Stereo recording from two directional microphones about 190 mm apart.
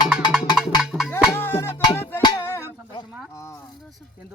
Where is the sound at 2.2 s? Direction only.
15° left (ahead or behind).